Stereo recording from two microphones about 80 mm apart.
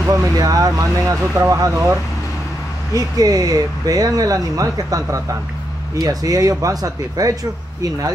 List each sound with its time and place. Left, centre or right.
0.1 s speech: right
1.7 s speech: right
2.9 s speech: right